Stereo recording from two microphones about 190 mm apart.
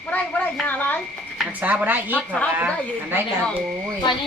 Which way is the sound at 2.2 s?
5° left (ahead or behind).